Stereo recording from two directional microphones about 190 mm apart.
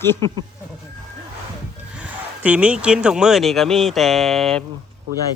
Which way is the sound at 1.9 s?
5° right (ahead or behind).